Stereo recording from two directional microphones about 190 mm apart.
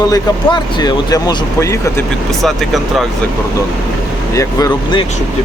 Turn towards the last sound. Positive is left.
turn(degrees=20)  # may be behind; listen again after turning